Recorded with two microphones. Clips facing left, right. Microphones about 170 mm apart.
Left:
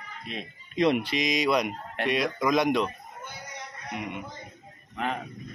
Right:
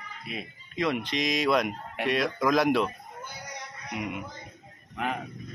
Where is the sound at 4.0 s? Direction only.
5° right (ahead or behind).